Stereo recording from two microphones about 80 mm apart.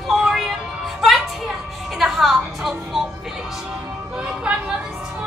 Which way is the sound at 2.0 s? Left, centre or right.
Centre.